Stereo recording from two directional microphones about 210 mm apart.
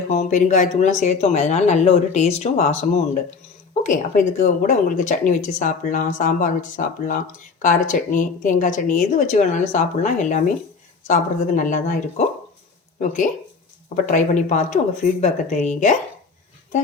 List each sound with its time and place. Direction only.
0.1 s speech: 35° left (ahead or behind)
13.9 s speech: 35° left (ahead or behind)